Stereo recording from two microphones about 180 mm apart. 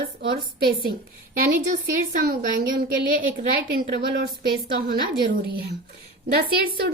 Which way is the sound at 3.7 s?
60° right (ahead or behind).